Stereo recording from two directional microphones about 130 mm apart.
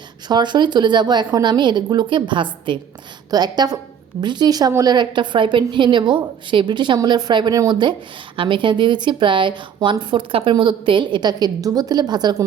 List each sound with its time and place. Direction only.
0.3 s speech: 35° right (ahead or behind)